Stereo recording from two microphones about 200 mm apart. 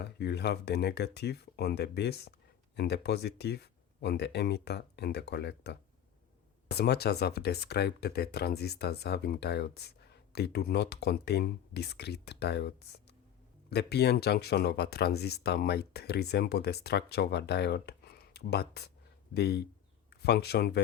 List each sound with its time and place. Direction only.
0.0 s speech: 55° left (ahead or behind)